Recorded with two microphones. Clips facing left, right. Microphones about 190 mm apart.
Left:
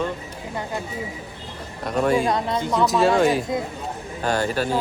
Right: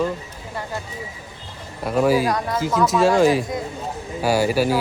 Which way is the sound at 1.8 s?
5° right (ahead or behind).